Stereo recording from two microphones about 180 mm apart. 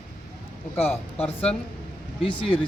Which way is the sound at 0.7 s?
5° left (ahead or behind).